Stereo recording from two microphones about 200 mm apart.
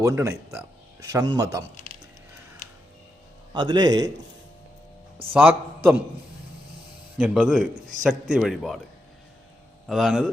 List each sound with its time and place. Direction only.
0.0 s a man's voice: 15° right (ahead or behind)
3.5 s a man's voice: 20° right (ahead or behind)
5.3 s a man's voice: 10° right (ahead or behind)
7.2 s speech: 5° right (ahead or behind)
9.8 s speech: centre (ahead or behind)